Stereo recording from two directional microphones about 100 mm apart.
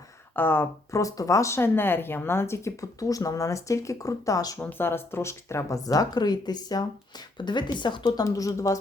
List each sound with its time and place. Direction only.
0.3 s speech: 20° left (ahead or behind)
4.6 s speech: 20° left (ahead or behind)